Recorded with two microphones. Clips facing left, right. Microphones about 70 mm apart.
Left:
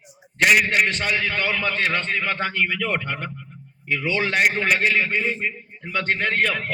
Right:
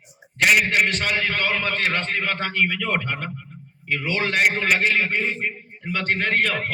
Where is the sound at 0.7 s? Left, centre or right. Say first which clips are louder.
Even; left.